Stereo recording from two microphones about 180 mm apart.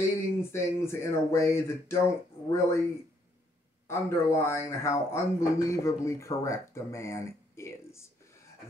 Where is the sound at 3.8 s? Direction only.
15° left (ahead or behind).